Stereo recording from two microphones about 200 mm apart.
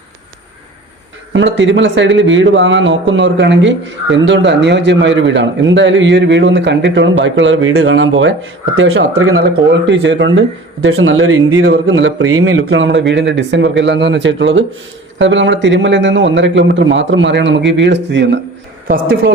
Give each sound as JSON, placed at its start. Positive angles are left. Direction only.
{"t": 1.3, "sound": "speech", "side_deg": -65}
{"t": 9.4, "sound": "speech", "side_deg": -65}
{"t": 10.8, "sound": "speech", "side_deg": -90}
{"t": 11.6, "sound": "speech", "side_deg": -70}
{"t": 18.9, "sound": "speech", "side_deg": -45}